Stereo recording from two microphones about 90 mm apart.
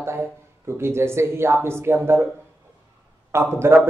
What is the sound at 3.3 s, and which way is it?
Speech, 30° right (ahead or behind).